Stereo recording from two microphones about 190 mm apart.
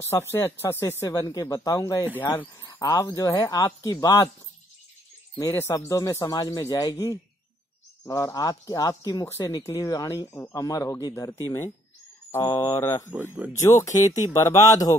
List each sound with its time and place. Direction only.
0.0 s speech: 15° left (ahead or behind)
5.4 s speech: 15° left (ahead or behind)
13.1 s speech: 10° right (ahead or behind)
13.6 s speech: 15° left (ahead or behind)